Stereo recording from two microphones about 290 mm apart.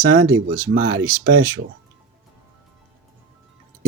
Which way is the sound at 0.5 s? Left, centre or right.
Right.